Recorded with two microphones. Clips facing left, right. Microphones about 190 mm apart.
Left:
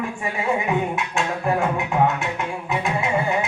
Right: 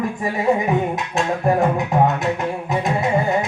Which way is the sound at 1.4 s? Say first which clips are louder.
Right 5 dB; 40° right (ahead or behind).